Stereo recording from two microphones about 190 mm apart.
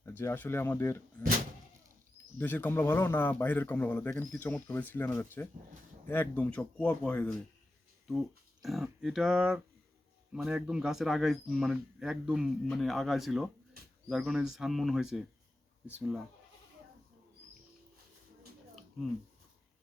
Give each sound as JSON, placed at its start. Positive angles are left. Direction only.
{"t": 0.0, "sound": "a man's voice", "side_deg": 10}
{"t": 2.4, "sound": "a man's voice", "side_deg": 10}